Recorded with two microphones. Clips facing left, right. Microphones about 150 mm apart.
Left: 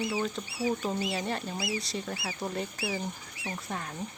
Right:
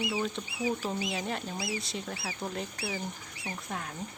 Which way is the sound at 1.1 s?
Centre (ahead or behind).